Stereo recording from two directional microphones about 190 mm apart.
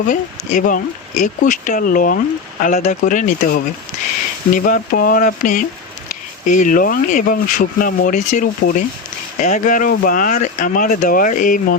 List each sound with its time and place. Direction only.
0.1 s speech: 45° left (ahead or behind)